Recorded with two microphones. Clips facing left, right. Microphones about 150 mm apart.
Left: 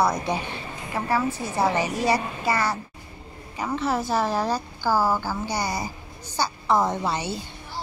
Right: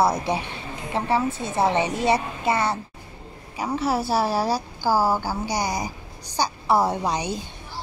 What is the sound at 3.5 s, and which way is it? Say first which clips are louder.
A woman's voice: right 1 dB; 10° right (ahead or behind).